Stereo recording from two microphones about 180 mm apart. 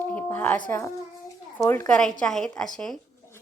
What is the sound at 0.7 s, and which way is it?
A woman's voice, 15° left (ahead or behind).